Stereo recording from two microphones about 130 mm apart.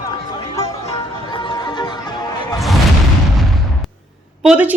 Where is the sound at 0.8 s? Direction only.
40° left (ahead or behind).